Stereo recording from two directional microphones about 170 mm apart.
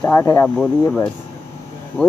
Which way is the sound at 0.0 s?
15° left (ahead or behind).